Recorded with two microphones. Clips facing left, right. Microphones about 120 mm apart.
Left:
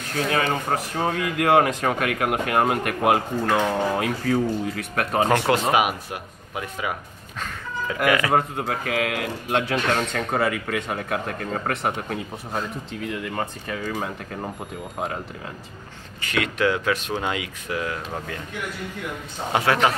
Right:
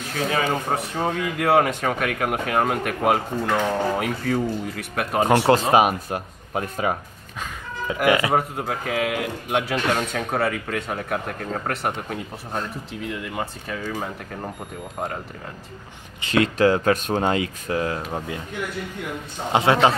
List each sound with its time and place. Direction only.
0.1 s speech: centre (ahead or behind)
5.7 s speech: 35° right (ahead or behind)
7.9 s a man's voice: 25° right (ahead or behind)
8.3 s speech: centre (ahead or behind)
16.2 s speech: 30° right (ahead or behind)
18.1 s a man's voice: 20° right (ahead or behind)
19.5 s a man's voice: 25° right (ahead or behind)